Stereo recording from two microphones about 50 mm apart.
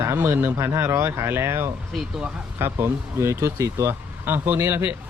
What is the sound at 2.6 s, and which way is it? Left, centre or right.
Speech, right.